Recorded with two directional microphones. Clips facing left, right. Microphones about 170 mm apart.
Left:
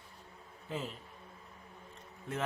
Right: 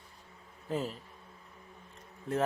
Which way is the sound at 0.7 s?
40° right (ahead or behind).